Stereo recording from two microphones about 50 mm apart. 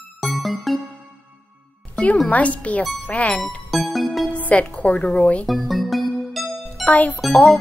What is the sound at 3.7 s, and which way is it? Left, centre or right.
Music, centre.